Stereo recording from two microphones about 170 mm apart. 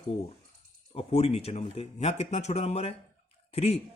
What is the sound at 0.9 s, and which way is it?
Speech, 35° left (ahead or behind).